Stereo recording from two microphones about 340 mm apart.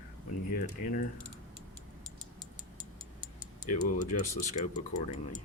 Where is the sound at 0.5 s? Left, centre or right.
Left.